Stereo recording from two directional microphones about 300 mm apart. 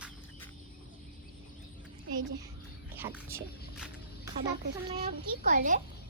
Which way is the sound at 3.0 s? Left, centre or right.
Centre.